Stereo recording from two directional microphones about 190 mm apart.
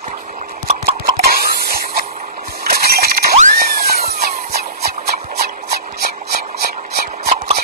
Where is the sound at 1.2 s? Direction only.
55° right (ahead or behind).